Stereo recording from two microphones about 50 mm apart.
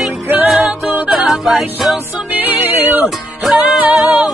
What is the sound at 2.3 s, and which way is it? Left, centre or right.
Music, right.